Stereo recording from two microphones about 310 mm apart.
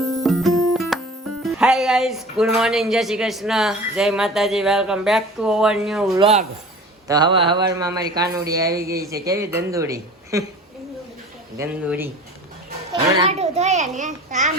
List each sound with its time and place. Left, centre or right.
0.0 s music: centre
1.4 s speech: centre
6.1 s a child's voice: centre
11.5 s speech: centre
12.9 s a child's voice: centre